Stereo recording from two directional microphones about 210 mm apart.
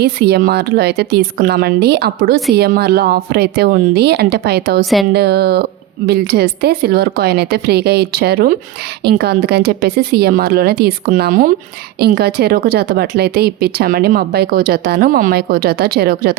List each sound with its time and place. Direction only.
0.0 s speech: 50° right (ahead or behind)